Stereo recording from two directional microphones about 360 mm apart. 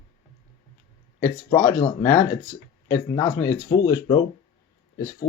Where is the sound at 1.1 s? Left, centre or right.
Centre.